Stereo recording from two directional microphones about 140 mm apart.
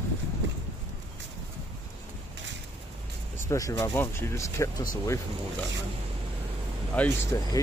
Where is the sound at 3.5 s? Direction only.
20° left (ahead or behind).